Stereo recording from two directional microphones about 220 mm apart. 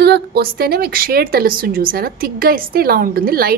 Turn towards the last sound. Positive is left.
turn(degrees=-40)  # may be behind; listen again after turning